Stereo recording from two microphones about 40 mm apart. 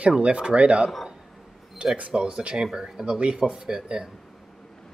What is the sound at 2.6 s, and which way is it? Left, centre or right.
Speech, centre.